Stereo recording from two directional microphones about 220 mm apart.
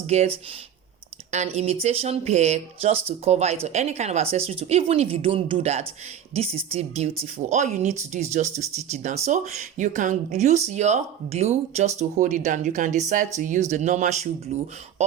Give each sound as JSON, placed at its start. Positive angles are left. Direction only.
{"t": 0.1, "sound": "speech", "side_deg": -30}